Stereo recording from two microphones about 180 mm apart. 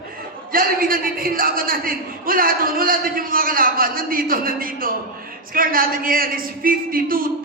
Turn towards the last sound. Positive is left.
turn(degrees=-50)  # may be behind; listen again after turning